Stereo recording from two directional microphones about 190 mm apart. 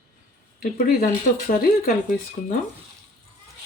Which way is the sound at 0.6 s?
50° left (ahead or behind).